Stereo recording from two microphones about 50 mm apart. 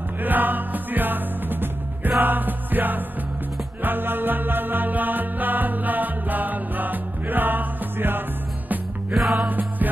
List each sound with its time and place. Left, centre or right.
0.2 s music: right
9.1 s music: centre
9.5 s music: right